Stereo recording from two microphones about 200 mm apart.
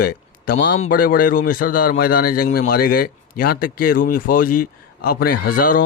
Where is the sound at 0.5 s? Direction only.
65° left (ahead or behind).